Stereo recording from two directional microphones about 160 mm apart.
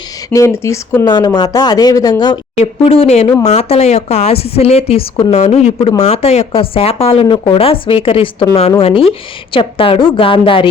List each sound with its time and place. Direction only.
0.3 s speech: 15° left (ahead or behind)
2.6 s speech: 40° left (ahead or behind)